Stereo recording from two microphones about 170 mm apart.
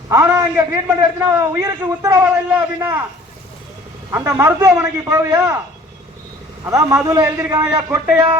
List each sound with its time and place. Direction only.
0.1 s a sound: 20° right (ahead or behind)
1.0 s a man's voice: 20° right (ahead or behind)
4.1 s a man's voice: 15° right (ahead or behind)
6.7 s a man's voice: 20° right (ahead or behind)